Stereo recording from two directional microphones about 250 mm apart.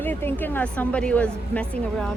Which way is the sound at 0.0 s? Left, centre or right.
Centre.